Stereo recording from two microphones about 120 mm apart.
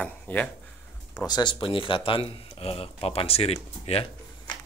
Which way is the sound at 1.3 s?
40° left (ahead or behind).